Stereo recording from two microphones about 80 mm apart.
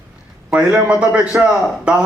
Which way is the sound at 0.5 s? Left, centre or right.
Centre.